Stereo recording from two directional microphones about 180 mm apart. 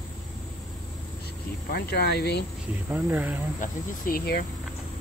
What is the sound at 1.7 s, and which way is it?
Speech, 60° left (ahead or behind).